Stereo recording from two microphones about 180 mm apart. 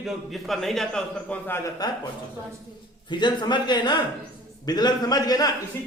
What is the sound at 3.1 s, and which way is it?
A man's voice, 25° left (ahead or behind).